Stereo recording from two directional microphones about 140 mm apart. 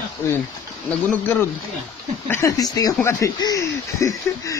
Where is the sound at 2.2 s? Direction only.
20° left (ahead or behind).